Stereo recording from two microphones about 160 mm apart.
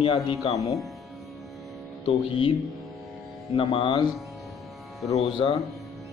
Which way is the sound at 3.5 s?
35° left (ahead or behind).